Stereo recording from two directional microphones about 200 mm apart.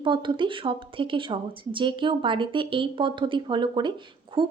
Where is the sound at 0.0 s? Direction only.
25° right (ahead or behind).